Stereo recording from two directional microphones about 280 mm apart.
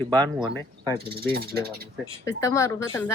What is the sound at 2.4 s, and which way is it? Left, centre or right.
Speech, centre.